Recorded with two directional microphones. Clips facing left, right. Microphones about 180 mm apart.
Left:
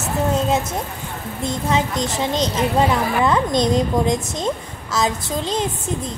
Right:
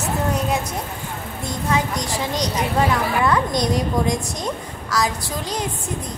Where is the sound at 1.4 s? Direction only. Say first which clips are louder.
Left 2 dB; 25° left (ahead or behind).